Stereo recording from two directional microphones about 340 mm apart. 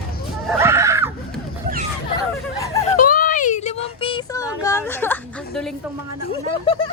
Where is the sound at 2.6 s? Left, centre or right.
Centre.